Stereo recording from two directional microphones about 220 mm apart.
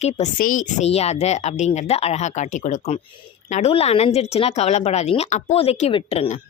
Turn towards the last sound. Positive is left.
turn(degrees=25)  # may be behind; listen again after turning